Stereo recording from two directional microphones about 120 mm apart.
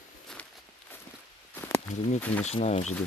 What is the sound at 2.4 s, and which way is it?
Speech, 65° left (ahead or behind).